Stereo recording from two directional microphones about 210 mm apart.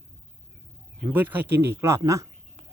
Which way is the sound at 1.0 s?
10° right (ahead or behind).